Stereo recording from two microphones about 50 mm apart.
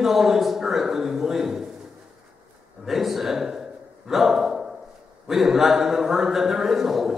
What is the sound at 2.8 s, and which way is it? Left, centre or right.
A man's voice, centre.